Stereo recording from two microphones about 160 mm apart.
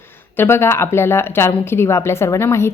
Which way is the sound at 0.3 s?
15° left (ahead or behind).